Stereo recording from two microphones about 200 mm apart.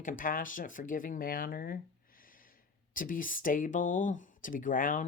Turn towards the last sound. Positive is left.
turn(degrees=40)  # may be behind; listen again after turning